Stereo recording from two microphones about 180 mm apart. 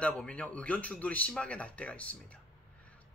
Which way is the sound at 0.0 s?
5° left (ahead or behind).